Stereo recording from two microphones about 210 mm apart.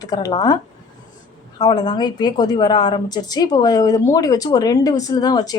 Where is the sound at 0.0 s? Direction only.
20° left (ahead or behind).